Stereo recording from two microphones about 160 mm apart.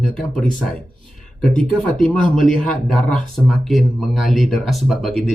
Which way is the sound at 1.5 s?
55° left (ahead or behind).